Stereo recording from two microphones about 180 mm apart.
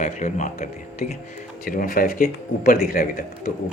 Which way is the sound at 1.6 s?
55° left (ahead or behind).